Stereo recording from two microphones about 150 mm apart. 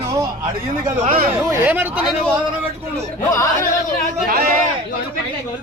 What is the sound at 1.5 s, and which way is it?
Speech, 15° right (ahead or behind).